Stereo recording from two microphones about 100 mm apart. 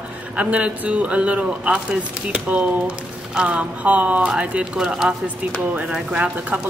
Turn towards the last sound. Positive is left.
turn(degrees=-10)  # may be behind; listen again after turning